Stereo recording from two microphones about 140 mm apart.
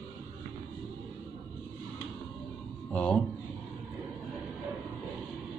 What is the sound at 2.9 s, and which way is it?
Speech, 10° left (ahead or behind).